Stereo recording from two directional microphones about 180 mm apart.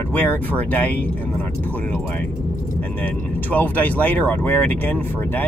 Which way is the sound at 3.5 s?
10° left (ahead or behind).